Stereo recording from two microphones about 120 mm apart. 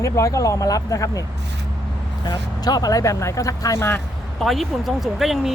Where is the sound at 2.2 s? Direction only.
35° left (ahead or behind).